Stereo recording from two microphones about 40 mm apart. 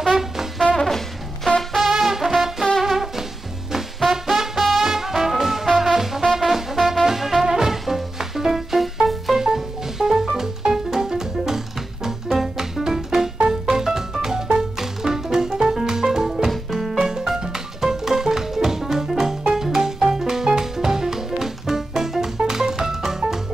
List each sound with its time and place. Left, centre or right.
0.0 s brass instrument: centre
0.7 s music: centre
1.8 s music: centre
17.0 s music: centre